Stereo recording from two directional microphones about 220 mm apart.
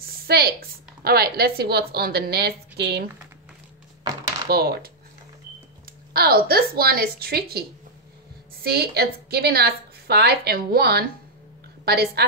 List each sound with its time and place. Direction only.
0.3 s a woman's voice: 45° right (ahead or behind)
4.5 s a woman's voice: 45° right (ahead or behind)
6.1 s a woman's voice: 45° right (ahead or behind)
8.6 s a woman's voice: 45° right (ahead or behind)